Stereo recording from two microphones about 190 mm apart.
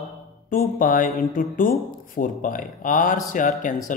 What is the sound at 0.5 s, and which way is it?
Speech, 45° left (ahead or behind).